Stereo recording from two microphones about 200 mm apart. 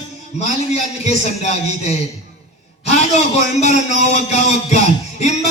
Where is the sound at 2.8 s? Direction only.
35° left (ahead or behind).